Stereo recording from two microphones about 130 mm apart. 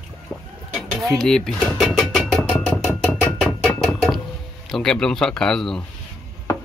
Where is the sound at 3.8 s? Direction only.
Centre (ahead or behind).